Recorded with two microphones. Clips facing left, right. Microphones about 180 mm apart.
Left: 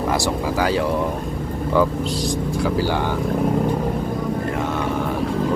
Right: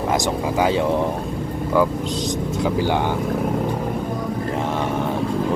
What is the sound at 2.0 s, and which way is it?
Speech, 20° right (ahead or behind).